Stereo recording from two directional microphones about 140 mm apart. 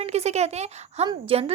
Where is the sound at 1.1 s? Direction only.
40° right (ahead or behind).